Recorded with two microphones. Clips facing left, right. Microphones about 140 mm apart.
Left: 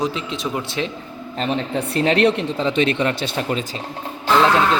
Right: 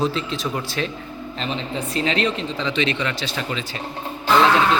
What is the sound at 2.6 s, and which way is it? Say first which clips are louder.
Speech: left 4 dB; 45° left (ahead or behind).